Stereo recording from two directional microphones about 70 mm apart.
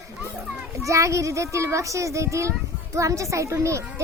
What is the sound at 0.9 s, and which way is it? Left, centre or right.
A woman's voice, right.